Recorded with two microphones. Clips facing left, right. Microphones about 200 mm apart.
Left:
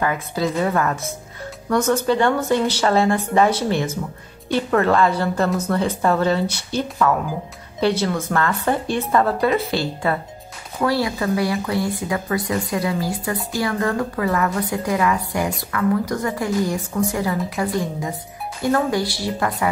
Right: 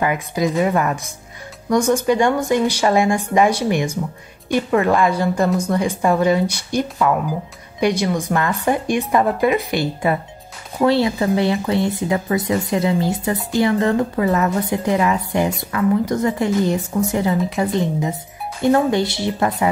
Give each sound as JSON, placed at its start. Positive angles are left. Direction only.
{"t": 0.0, "sound": "speech", "side_deg": -15}